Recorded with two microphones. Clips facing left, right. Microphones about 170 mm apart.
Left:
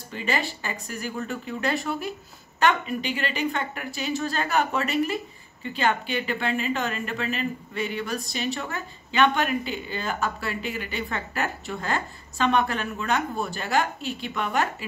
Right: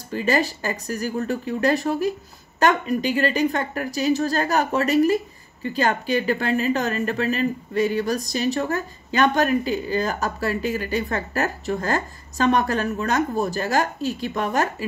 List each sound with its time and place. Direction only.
0.1 s a woman's voice: 40° right (ahead or behind)